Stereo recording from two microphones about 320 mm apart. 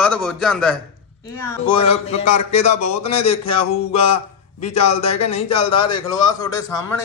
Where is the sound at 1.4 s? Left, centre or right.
Centre.